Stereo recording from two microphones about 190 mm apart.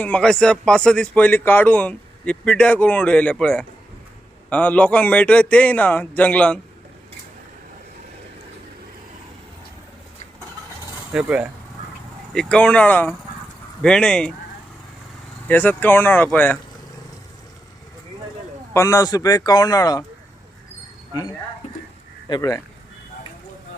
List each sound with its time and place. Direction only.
0.0 s a man's voice: 5° left (ahead or behind)
11.1 s speech: 5° right (ahead or behind)
15.4 s a man's voice: 10° left (ahead or behind)
18.7 s a man's voice: 15° left (ahead or behind)
22.3 s a man's voice: 20° left (ahead or behind)